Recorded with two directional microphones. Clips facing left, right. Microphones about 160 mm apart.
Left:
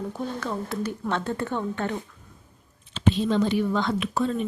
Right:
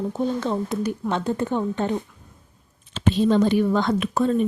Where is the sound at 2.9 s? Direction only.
45° right (ahead or behind).